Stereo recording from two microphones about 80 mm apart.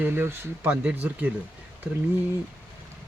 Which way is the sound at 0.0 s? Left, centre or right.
Right.